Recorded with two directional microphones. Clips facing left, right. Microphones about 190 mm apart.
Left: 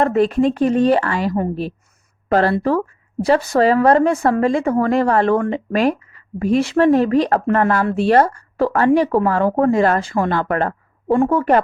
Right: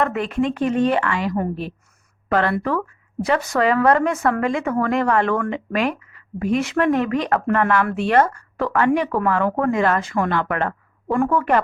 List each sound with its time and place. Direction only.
0.0 s speech: 35° left (ahead or behind)